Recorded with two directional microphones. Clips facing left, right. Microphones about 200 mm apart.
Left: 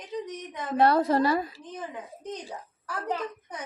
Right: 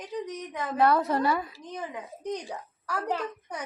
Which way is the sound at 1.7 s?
15° right (ahead or behind).